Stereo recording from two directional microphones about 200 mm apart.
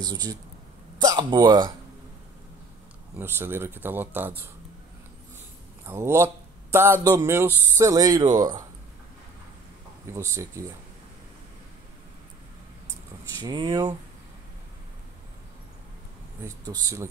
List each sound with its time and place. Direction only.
0.0 s speech: 20° right (ahead or behind)
3.2 s speech: 10° right (ahead or behind)
5.9 s speech: 10° right (ahead or behind)
10.1 s speech: 15° right (ahead or behind)
13.4 s speech: 20° right (ahead or behind)
16.4 s speech: 15° right (ahead or behind)